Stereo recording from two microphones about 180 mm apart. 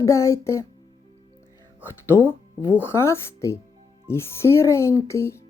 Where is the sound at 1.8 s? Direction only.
10° left (ahead or behind).